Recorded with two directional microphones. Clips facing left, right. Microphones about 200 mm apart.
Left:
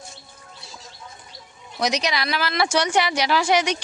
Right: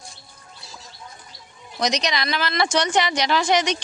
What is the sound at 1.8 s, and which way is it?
A woman's voice, 10° left (ahead or behind).